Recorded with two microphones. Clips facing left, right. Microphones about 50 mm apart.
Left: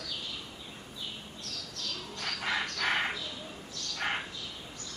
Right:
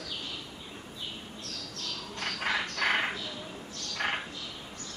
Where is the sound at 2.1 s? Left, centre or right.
Right.